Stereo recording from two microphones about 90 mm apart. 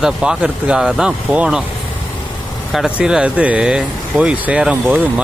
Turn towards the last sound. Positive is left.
turn(degrees=-15)  # may be behind; listen again after turning